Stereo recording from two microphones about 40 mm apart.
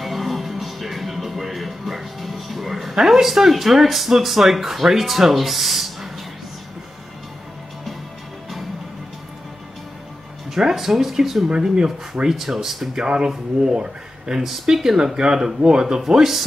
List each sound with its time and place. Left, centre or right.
0.0 s music: centre
10.5 s speech: centre
11.4 s speech: centre
12.3 s speech: centre
12.9 s speech: right
14.4 s speech: centre